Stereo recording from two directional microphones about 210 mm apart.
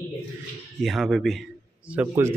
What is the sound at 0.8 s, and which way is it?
Speech, centre (ahead or behind).